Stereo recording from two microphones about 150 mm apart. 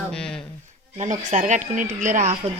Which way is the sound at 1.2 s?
55° right (ahead or behind).